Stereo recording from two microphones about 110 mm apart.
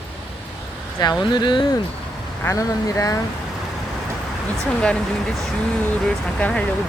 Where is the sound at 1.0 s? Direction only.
40° left (ahead or behind).